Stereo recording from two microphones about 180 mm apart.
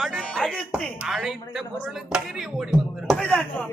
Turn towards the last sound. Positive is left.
turn(degrees=5)  # may be behind; listen again after turning